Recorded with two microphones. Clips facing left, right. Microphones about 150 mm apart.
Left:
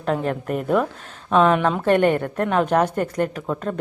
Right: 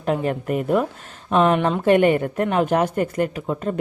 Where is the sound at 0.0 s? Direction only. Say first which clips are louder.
Right 1 dB; 5° right (ahead or behind).